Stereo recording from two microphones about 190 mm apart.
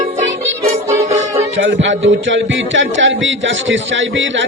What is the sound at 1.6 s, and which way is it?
A man's voice, 75° right (ahead or behind).